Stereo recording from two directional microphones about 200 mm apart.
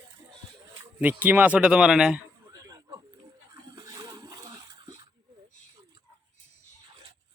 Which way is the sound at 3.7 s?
20° right (ahead or behind).